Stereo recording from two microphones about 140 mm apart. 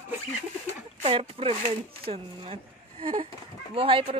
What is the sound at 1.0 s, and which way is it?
Speech, 45° right (ahead or behind).